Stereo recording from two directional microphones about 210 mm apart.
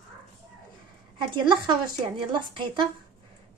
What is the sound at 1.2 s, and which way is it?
Speech, 20° right (ahead or behind).